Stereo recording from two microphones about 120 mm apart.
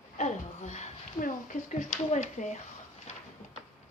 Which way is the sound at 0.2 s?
80° left.